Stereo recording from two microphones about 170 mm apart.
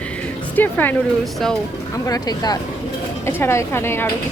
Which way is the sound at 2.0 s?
20° left (ahead or behind).